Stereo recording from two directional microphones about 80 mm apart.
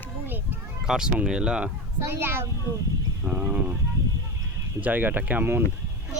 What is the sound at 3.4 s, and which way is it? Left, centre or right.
Speech, centre.